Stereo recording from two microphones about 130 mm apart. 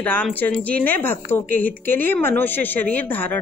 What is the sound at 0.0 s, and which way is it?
Speech, 10° left (ahead or behind).